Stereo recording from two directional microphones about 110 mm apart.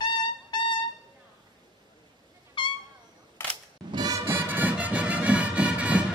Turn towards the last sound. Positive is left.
turn(degrees=-10)  # may be behind; listen again after turning